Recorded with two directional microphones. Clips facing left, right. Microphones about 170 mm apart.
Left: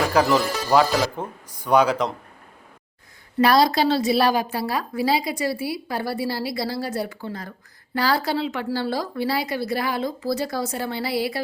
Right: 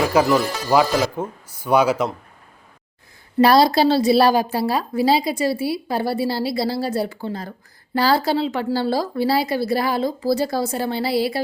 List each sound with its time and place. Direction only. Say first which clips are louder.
0.3 s speech: right 2 dB; centre (ahead or behind)
3.3 s a woman's voice: right 3 dB; 30° right (ahead or behind)